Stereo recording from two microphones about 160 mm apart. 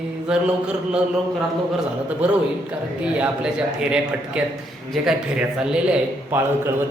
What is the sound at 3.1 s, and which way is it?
A man's voice, 5° right (ahead or behind).